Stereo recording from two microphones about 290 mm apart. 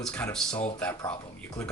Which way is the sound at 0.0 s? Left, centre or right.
Centre.